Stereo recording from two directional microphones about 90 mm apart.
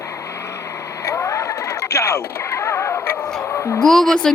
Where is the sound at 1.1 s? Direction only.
35° left (ahead or behind).